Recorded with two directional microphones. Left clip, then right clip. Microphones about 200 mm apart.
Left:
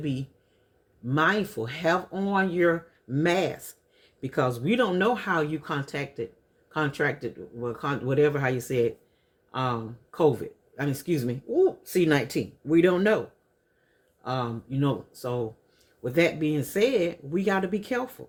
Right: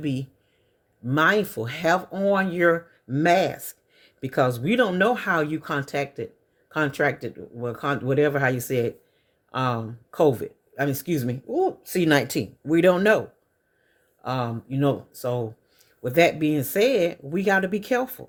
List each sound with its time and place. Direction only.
0.0 s speech: 55° right (ahead or behind)